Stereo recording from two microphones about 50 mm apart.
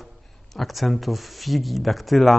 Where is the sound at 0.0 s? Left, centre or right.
Centre.